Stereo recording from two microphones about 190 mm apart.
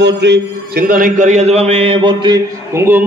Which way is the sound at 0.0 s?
65° right (ahead or behind).